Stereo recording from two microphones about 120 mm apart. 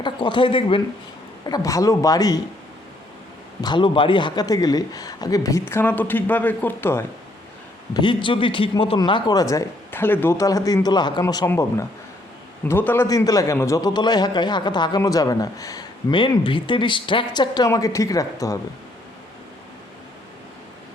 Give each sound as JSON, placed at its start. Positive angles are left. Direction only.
{"t": 0.0, "sound": "speech", "side_deg": 40}
{"t": 1.5, "sound": "a man's voice", "side_deg": 30}
{"t": 3.6, "sound": "a man's voice", "side_deg": 40}
{"t": 7.9, "sound": "speech", "side_deg": 45}
{"t": 11.4, "sound": "a man's voice", "side_deg": 20}
{"t": 13.1, "sound": "a man's voice", "side_deg": 30}